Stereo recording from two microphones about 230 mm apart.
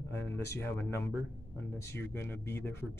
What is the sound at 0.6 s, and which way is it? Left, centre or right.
Speech, centre.